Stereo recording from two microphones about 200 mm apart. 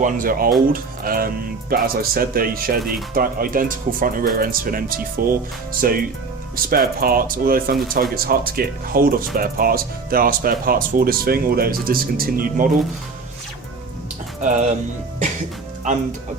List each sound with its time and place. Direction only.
0.0 s speech: 45° right (ahead or behind)
14.4 s speech: 40° right (ahead or behind)